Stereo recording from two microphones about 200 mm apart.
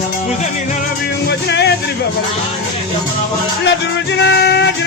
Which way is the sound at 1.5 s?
55° left (ahead or behind).